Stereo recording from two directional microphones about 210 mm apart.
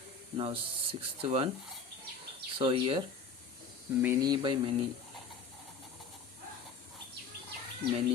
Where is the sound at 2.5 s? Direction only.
25° right (ahead or behind).